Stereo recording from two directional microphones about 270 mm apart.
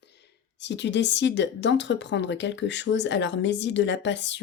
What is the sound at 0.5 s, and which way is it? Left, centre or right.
A woman's voice, left.